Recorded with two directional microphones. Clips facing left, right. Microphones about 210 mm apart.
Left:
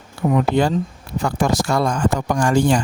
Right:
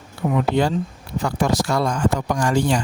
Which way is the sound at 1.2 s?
50° left (ahead or behind).